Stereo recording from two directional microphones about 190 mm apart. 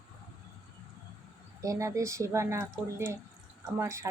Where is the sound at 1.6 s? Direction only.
15° right (ahead or behind).